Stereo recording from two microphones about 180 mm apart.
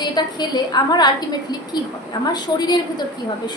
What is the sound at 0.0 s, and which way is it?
A woman's voice, 25° left (ahead or behind).